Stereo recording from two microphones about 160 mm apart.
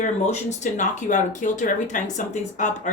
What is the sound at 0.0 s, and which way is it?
Speech, 45° left (ahead or behind).